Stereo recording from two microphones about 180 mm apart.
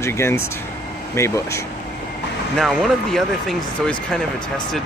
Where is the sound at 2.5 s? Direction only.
Centre (ahead or behind).